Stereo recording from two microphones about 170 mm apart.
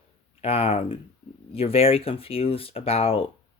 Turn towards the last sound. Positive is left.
turn(degrees=35)  # may be behind; listen again after turning